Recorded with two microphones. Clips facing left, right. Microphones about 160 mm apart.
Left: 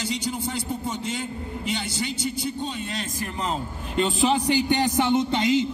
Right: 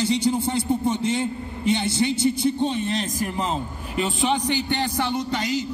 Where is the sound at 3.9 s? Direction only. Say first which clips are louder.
Left 1 dB; centre (ahead or behind).